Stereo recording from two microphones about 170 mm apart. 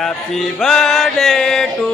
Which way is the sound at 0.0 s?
Centre (ahead or behind).